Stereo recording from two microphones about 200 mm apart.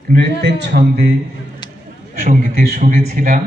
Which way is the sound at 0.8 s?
50° right (ahead or behind).